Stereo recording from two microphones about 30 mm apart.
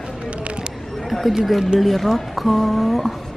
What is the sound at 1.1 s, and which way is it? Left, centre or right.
Speech, centre.